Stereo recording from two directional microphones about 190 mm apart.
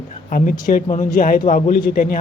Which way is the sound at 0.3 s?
45° left (ahead or behind).